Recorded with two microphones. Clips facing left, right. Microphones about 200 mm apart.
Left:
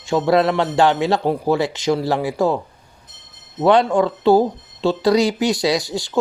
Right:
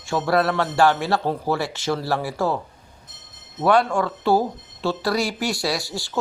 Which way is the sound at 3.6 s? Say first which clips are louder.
Left 4 dB; 20° left (ahead or behind).